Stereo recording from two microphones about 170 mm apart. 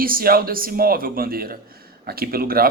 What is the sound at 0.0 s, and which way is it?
Speech, 60° right (ahead or behind).